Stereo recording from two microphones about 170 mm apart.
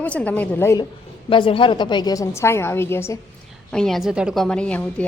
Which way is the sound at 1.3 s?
30° left (ahead or behind).